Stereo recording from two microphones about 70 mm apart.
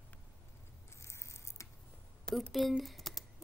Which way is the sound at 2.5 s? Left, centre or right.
Centre.